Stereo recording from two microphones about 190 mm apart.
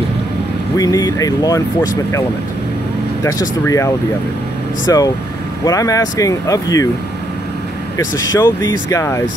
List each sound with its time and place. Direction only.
0.7 s speech: 20° left (ahead or behind)
3.3 s speech: 15° left (ahead or behind)
8.0 s speech: 20° left (ahead or behind)